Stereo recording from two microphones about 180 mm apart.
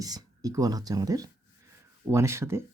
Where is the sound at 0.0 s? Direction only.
20° right (ahead or behind).